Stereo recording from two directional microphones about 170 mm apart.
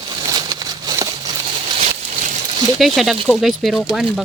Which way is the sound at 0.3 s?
20° right (ahead or behind).